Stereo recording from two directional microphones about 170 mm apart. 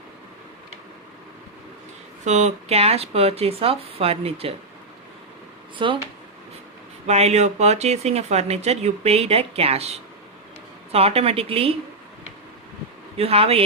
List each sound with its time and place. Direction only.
2.2 s speech: 45° right (ahead or behind)
5.8 s speech: 30° right (ahead or behind)
7.1 s speech: 40° right (ahead or behind)
13.1 s speech: 35° right (ahead or behind)